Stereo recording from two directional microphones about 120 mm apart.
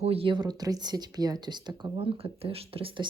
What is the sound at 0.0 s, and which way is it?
Speech, 50° right (ahead or behind).